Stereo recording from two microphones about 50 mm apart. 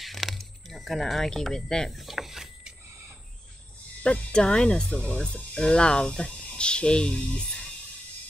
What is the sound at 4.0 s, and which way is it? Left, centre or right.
Speech, left.